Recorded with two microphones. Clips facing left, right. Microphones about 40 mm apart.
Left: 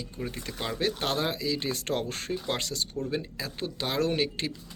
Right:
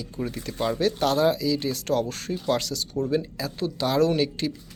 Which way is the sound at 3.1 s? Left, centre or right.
Left.